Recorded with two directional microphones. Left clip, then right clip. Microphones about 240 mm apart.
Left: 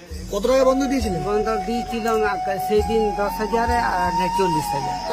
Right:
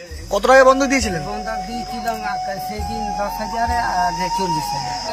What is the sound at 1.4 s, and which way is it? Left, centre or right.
Speech, left.